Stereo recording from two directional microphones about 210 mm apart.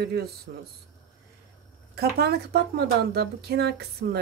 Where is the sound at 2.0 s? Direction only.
50° right (ahead or behind).